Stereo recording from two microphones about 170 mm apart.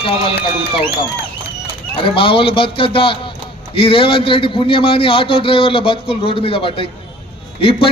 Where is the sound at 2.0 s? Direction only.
30° left (ahead or behind).